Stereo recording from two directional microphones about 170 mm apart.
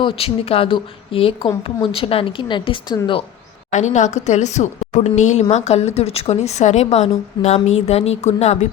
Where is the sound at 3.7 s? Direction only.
45° left (ahead or behind).